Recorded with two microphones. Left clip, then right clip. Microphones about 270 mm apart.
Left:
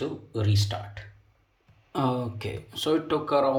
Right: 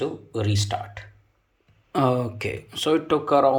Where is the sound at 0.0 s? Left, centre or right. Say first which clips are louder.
Right 4 dB; centre.